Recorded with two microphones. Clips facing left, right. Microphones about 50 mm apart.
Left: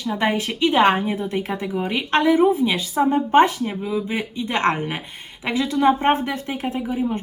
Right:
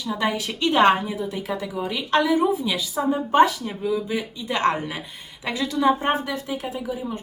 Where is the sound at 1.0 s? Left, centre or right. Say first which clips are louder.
Left 4 dB; left.